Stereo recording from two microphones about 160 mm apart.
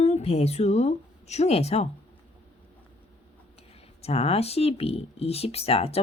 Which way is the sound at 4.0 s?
40° left (ahead or behind).